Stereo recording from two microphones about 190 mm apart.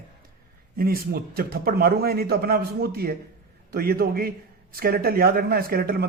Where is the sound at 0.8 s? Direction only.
50° right (ahead or behind).